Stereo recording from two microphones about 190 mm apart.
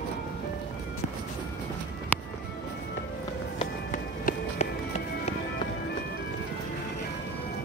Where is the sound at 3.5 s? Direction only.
40° left (ahead or behind).